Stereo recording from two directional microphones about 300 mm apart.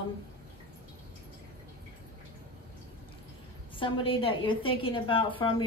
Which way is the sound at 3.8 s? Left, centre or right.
Centre.